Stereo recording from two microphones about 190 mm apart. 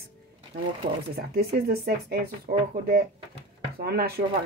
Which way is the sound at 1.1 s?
55° right (ahead or behind).